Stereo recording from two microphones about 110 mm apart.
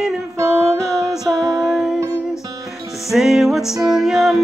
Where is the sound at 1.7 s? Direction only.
5° right (ahead or behind).